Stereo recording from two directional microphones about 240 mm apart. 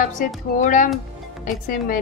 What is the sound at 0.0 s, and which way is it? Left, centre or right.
A woman's voice, left.